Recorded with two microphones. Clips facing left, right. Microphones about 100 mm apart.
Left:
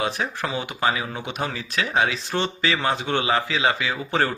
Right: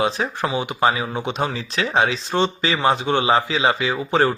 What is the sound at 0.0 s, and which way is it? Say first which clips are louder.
Speech: right 4 dB; 20° right (ahead or behind).